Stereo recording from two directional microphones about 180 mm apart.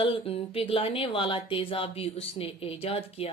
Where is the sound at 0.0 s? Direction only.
30° left (ahead or behind).